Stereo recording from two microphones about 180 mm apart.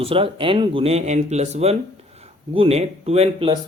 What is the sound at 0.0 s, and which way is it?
Speech, 30° right (ahead or behind).